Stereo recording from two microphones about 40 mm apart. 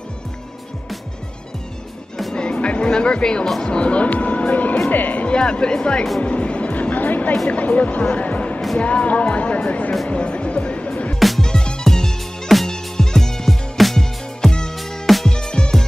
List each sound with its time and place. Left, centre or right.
2.6 s speech: left
5.4 s speech: left
6.2 s music: left
7.0 s music: left
7.4 s speech: left
8.1 s music: left
8.7 s speech: left
11.1 s music: centre
11.4 s music: centre
13.5 s music: centre
14.4 s music: centre
14.8 s music: centre
15.2 s music: centre